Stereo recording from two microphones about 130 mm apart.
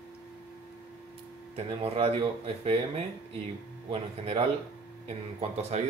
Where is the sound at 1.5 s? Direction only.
45° right (ahead or behind).